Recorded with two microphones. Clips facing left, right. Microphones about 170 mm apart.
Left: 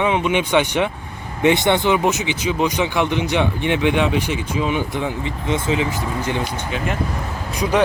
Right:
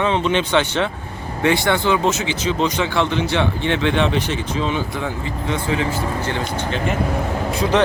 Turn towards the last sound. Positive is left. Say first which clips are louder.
# right 1 dB
turn(degrees=10)  # may be behind; listen again after turning